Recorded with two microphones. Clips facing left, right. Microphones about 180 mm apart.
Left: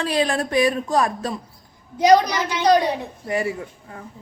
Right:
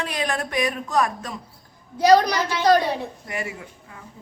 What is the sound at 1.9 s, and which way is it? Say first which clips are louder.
Speech: left 1 dB; 20° left (ahead or behind).